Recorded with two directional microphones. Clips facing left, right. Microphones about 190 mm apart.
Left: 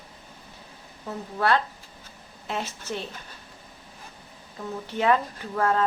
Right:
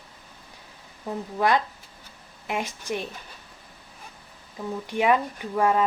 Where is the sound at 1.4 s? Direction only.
15° right (ahead or behind).